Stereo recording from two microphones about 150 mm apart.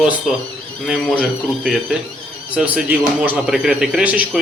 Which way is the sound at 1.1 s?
Centre (ahead or behind).